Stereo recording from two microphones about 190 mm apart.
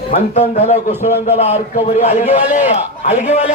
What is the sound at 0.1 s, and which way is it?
A man's voice, 35° left (ahead or behind).